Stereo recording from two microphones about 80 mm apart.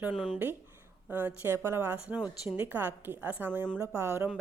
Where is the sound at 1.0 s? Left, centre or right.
Right.